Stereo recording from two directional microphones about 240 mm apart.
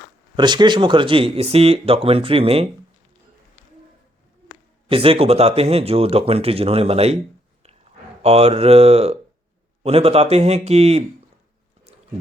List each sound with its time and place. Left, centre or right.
0.3 s speech: centre
4.9 s speech: right
8.2 s speech: right
11.9 s a sound: right